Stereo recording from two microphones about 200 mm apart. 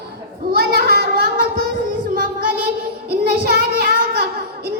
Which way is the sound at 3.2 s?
50° right (ahead or behind).